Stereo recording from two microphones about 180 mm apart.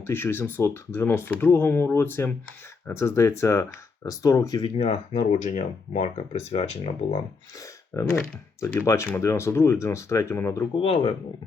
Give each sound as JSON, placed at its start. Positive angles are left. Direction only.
{"t": 0.1, "sound": "speech", "side_deg": 15}
{"t": 4.6, "sound": "speech", "side_deg": 35}
{"t": 7.6, "sound": "speech", "side_deg": 15}
{"t": 10.8, "sound": "speech", "side_deg": 30}